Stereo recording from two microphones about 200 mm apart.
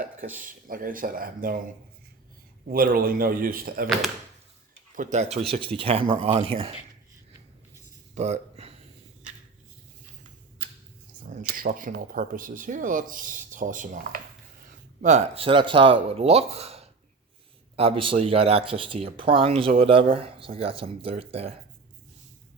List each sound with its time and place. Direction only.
0.3 s speech: 45° right (ahead or behind)
2.6 s speech: 45° right (ahead or behind)
5.1 s speech: 30° right (ahead or behind)
8.1 s a sound: 35° right (ahead or behind)
11.4 s speech: 45° right (ahead or behind); by 21.5 s 30° right (ahead or behind)